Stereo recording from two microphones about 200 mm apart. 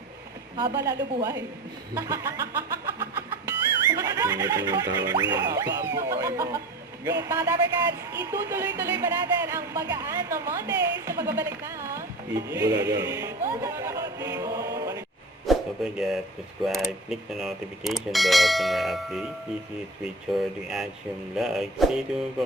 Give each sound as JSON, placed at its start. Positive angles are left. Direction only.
{"t": 0.8, "sound": "speech", "side_deg": -15}
{"t": 3.8, "sound": "music", "side_deg": -15}
{"t": 5.3, "sound": "speech", "side_deg": -20}
{"t": 15.4, "sound": "speech", "side_deg": 0}
{"t": 20.3, "sound": "speech", "side_deg": 0}